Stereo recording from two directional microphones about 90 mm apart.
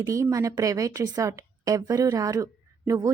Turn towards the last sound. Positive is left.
turn(degrees=-40)  # may be behind; listen again after turning